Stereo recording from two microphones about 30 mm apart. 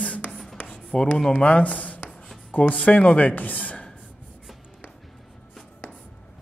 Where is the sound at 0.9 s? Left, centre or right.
Left.